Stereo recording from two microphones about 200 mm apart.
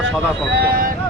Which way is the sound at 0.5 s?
50° right (ahead or behind).